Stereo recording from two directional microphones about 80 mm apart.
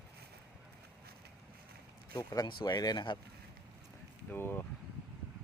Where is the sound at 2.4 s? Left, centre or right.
Left.